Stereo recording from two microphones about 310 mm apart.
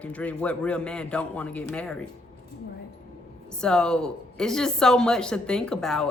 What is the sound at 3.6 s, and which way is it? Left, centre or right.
A woman's voice, centre.